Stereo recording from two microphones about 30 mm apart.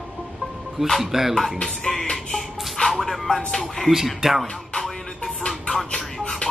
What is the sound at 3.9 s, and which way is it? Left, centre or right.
Speech, centre.